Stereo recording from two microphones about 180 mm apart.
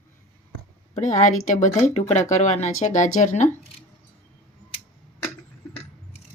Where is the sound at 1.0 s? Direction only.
40° left (ahead or behind).